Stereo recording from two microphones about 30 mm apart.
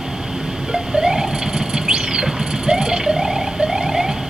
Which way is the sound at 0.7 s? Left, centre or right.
Right.